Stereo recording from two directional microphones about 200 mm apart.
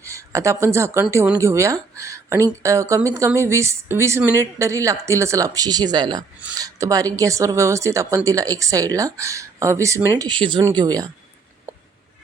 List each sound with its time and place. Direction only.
0.0 s speech: 15° right (ahead or behind)